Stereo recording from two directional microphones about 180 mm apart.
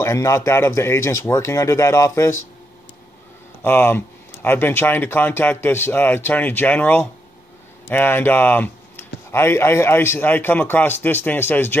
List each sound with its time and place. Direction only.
0.0 s speech: 15° left (ahead or behind)
3.6 s speech: 10° left (ahead or behind)